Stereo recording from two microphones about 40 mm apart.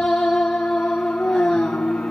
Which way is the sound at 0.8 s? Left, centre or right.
Left.